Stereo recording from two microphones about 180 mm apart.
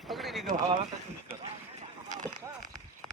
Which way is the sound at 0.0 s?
Centre (ahead or behind).